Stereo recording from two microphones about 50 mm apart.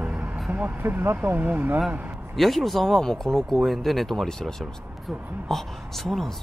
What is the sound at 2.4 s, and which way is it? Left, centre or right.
Speech, centre.